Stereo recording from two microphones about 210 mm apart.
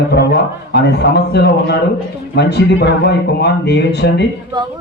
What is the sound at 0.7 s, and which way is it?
A man's voice, 55° left (ahead or behind).